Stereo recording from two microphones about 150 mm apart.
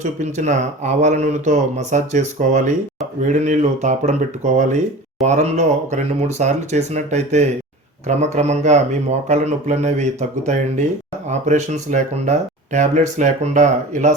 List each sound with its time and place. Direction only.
0.0 s speech: 50° right (ahead or behind)